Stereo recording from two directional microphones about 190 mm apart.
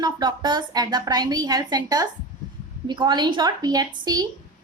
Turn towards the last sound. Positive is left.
turn(degrees=-20)  # may be behind; listen again after turning